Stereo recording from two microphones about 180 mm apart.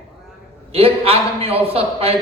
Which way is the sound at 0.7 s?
35° right (ahead or behind).